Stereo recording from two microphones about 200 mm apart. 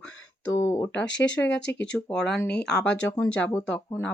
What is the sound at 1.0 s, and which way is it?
Speech, 65° left (ahead or behind).